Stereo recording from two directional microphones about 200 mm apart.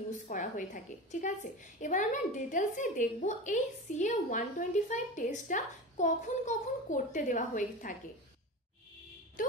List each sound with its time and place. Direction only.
0.1 s a woman's voice: 40° left (ahead or behind)
9.4 s a woman's voice: 40° left (ahead or behind)